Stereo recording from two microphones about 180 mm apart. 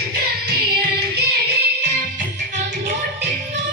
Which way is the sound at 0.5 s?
65° right (ahead or behind).